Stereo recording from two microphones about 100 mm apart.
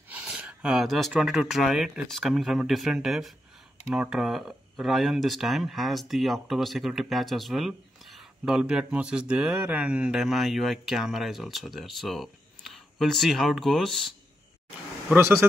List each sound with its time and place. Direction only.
0.3 s a sound: 10° right (ahead or behind)
1.2 s speech: 5° right (ahead or behind)
15.1 s speech: 25° right (ahead or behind)